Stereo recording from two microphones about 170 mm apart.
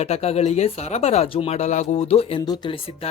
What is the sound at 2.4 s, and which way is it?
Speech, 25° left (ahead or behind).